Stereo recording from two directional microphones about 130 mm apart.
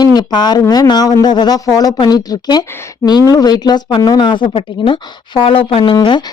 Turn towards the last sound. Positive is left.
turn(degrees=35)  # may be behind; listen again after turning